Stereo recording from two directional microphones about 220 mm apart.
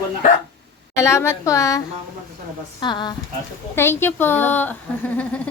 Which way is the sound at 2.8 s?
20° left (ahead or behind).